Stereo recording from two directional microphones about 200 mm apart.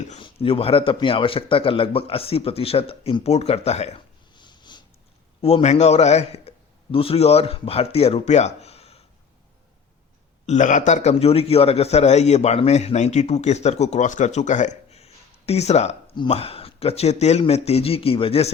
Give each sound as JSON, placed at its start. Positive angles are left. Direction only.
{"t": 0.1, "sound": "a man's voice", "side_deg": 25}
{"t": 10.4, "sound": "a man's voice", "side_deg": 35}